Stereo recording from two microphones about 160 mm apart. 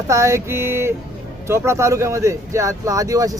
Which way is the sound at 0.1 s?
20° right (ahead or behind).